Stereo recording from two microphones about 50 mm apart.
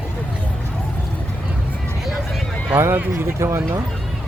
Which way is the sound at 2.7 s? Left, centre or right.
Right.